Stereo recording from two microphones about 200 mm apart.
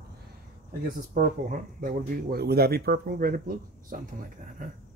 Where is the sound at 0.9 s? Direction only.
40° right (ahead or behind).